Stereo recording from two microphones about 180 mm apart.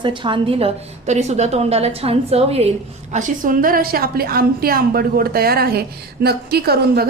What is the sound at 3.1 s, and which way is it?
A woman's voice, 45° right (ahead or behind).